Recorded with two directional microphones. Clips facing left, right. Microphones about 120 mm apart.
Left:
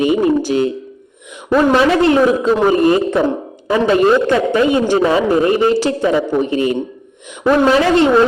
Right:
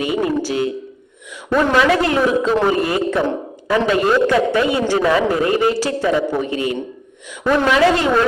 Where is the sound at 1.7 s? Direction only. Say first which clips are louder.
Left 3 dB; 30° left (ahead or behind).